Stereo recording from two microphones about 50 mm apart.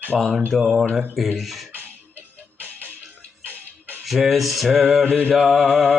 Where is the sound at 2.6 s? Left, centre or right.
Right.